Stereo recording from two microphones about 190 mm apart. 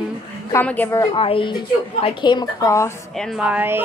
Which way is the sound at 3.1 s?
Centre (ahead or behind).